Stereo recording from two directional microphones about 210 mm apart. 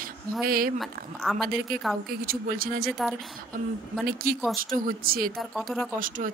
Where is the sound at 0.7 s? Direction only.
Centre (ahead or behind).